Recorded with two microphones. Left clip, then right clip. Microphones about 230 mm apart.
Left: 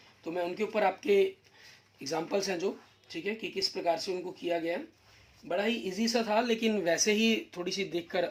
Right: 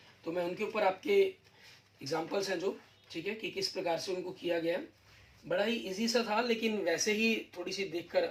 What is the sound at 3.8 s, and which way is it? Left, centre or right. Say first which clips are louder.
Speech: left 5 dB; left.